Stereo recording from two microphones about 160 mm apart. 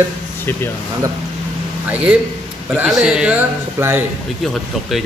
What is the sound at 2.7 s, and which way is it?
A man's voice, 5° right (ahead or behind).